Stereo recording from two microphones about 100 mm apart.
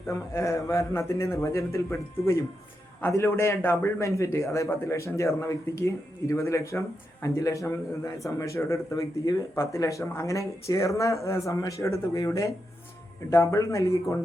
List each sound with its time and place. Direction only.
0.1 s a man's voice: 30° left (ahead or behind)